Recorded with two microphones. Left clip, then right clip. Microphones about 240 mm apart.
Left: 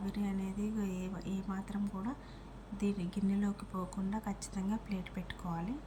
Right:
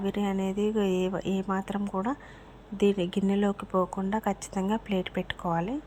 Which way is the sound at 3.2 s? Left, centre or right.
Right.